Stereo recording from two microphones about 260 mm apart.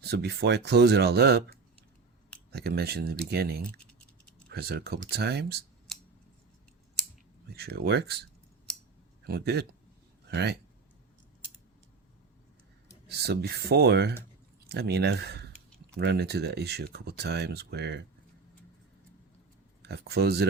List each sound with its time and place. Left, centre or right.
0.0 s speech: right
2.5 s speech: right
7.5 s speech: right
9.2 s speech: right
13.1 s speech: right
19.8 s speech: right